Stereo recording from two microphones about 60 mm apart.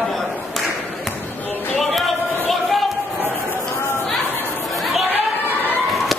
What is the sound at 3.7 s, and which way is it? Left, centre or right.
Chatter, left.